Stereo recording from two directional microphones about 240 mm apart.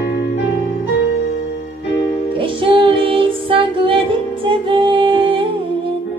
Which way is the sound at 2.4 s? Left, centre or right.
Right.